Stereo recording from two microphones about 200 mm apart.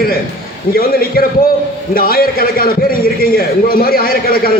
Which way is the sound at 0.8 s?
50° left (ahead or behind).